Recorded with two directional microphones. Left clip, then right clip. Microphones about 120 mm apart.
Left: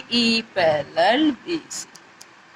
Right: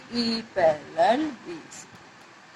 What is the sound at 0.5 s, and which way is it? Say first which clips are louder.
Speech: even; 20° left (ahead or behind).